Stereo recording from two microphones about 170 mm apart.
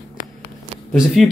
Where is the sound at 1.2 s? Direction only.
Centre (ahead or behind).